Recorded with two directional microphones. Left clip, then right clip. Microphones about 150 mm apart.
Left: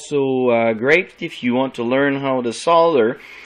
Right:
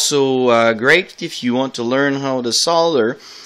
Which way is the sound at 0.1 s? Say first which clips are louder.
Even; 40° right (ahead or behind).